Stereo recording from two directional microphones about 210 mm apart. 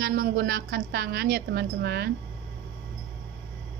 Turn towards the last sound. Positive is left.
turn(degrees=-50)  # may be behind; listen again after turning